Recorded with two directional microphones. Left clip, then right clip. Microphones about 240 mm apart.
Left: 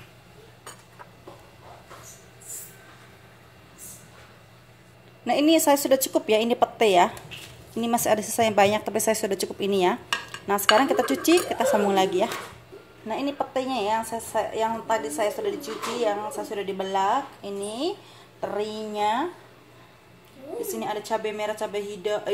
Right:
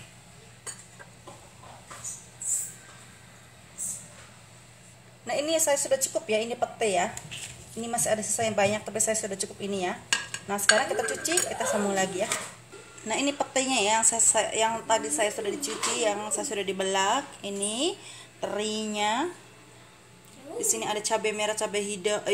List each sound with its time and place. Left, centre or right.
5.2 s a woman's voice: left
10.0 s dishes: centre
10.8 s a woman's voice: left
13.0 s a woman's voice: centre
20.6 s a woman's voice: centre